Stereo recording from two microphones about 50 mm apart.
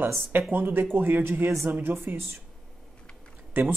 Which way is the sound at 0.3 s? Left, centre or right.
Right.